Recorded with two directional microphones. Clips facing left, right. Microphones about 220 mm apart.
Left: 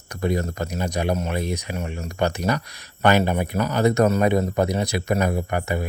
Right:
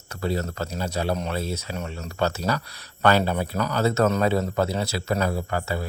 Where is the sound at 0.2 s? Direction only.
15° left (ahead or behind).